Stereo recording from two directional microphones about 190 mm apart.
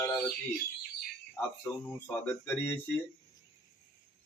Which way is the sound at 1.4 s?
10° left (ahead or behind).